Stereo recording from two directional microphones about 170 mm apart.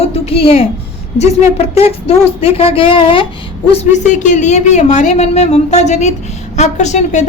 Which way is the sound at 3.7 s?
40° left (ahead or behind).